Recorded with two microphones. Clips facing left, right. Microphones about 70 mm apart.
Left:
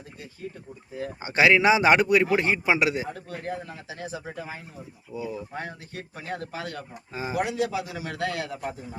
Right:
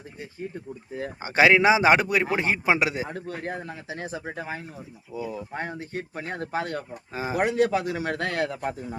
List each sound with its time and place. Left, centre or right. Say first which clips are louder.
0.9 s speech: right 2 dB; right